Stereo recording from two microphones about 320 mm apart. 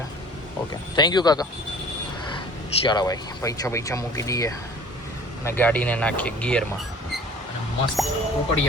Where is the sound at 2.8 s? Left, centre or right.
Centre.